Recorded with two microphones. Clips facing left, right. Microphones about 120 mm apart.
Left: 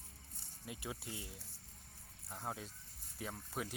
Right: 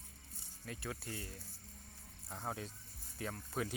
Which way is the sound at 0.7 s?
15° left (ahead or behind).